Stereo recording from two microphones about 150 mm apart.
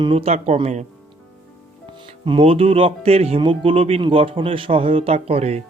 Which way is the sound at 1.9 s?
35° right (ahead or behind).